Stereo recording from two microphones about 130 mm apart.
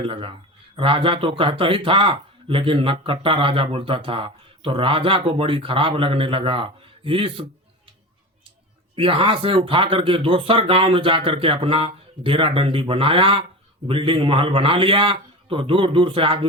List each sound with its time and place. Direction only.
0.0 s a man's voice: 40° right (ahead or behind)
9.0 s a man's voice: 40° right (ahead or behind)